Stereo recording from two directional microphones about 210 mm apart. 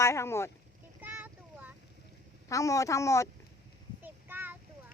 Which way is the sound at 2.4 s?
15° left (ahead or behind).